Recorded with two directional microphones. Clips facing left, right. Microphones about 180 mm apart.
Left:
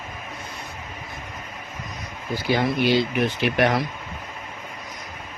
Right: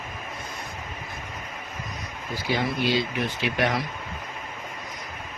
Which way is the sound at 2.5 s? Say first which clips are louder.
Left 4 dB; 65° left (ahead or behind).